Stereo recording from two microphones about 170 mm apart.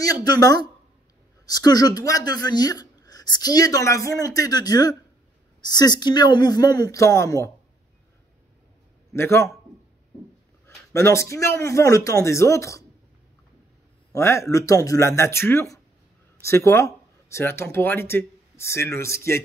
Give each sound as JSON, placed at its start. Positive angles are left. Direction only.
{"t": 0.0, "sound": "speech", "side_deg": 20}
{"t": 9.1, "sound": "speech", "side_deg": 15}
{"t": 10.9, "sound": "speech", "side_deg": 15}
{"t": 14.1, "sound": "speech", "side_deg": 15}